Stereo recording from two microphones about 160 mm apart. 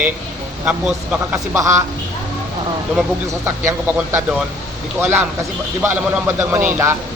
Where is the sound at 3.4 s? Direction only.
15° right (ahead or behind).